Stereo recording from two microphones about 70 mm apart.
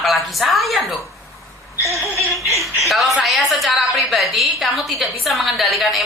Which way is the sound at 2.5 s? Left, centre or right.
Right.